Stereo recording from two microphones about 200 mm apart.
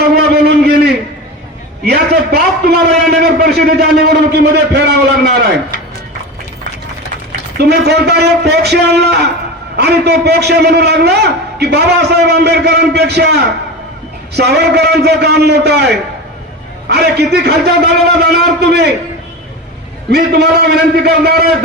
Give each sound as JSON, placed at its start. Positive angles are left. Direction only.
{"t": 0.2, "sound": "a sound", "side_deg": -55}
{"t": 1.8, "sound": "a man's voice", "side_deg": -50}
{"t": 7.6, "sound": "a man's voice", "side_deg": -55}
{"t": 14.3, "sound": "a man's voice", "side_deg": -55}
{"t": 20.1, "sound": "a man's voice", "side_deg": -55}